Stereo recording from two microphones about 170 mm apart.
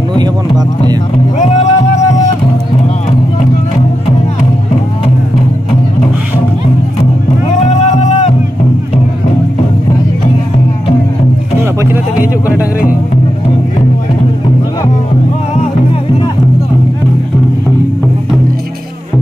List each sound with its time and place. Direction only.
0.2 s music: 25° right (ahead or behind)
1.4 s music: 40° left (ahead or behind)
7.6 s music: 40° left (ahead or behind)
11.6 s music: 15° right (ahead or behind)